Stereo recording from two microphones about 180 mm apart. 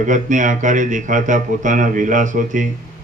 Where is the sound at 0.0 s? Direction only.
45° right (ahead or behind).